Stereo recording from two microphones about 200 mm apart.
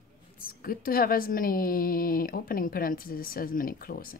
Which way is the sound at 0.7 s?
45° left (ahead or behind).